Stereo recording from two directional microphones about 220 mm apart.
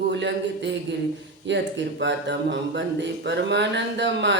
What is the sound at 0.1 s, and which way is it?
Speech, 55° right (ahead or behind).